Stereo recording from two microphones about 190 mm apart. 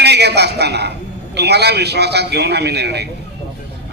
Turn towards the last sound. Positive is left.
turn(degrees=-60)  # may be behind; listen again after turning